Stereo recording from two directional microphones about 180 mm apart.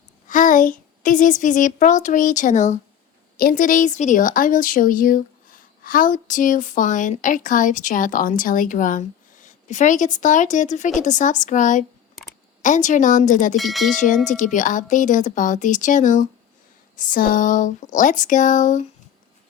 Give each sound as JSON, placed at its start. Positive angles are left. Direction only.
{"t": 0.3, "sound": "a child's voice", "side_deg": 45}
{"t": 3.3, "sound": "speech", "side_deg": 50}
{"t": 13.6, "sound": "speech", "side_deg": 0}
{"t": 14.3, "sound": "speech", "side_deg": 45}